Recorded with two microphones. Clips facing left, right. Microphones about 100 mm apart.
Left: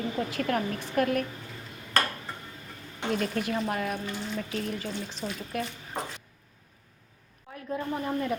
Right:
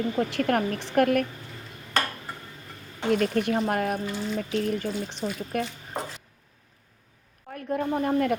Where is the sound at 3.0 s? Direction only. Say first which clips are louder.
Right 5 dB; 50° right (ahead or behind).